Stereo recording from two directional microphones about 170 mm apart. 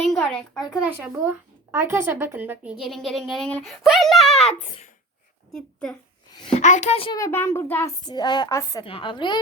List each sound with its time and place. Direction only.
0.1 s a child's voice: 5° left (ahead or behind)
6.4 s a woman's voice: 40° left (ahead or behind)
7.2 s a child's voice: 15° left (ahead or behind)
8.8 s speech: 30° left (ahead or behind)